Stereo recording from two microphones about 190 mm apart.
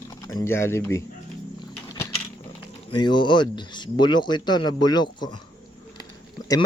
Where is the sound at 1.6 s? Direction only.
20° left (ahead or behind).